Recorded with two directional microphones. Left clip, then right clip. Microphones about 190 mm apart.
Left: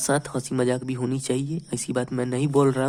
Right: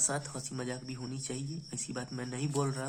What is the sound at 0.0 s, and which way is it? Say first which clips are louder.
A man's voice: left 11 dB; 45° left (ahead or behind).